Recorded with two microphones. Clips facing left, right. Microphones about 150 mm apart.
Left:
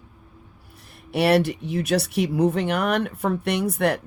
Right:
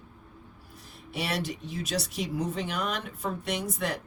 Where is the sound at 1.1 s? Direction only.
65° left (ahead or behind).